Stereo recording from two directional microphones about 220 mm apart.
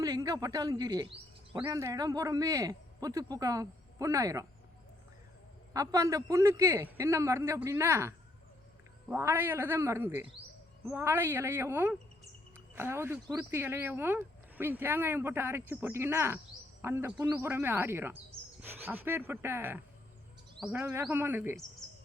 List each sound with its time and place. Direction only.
0.0 s speech: 15° right (ahead or behind)
5.7 s speech: 15° right (ahead or behind)